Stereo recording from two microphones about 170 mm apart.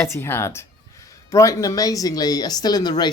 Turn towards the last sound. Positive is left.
turn(degrees=25)  # may be behind; listen again after turning